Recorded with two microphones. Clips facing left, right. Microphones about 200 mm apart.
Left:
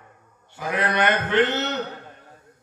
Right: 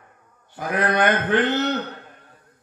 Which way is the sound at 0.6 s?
45° right (ahead or behind).